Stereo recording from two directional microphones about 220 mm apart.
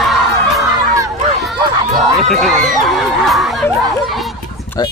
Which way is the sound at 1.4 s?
Centre (ahead or behind).